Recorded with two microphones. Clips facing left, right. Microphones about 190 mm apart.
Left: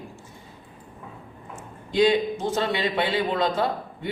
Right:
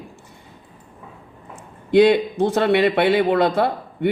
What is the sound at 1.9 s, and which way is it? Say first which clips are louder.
A man's voice: right 6 dB; 65° right (ahead or behind).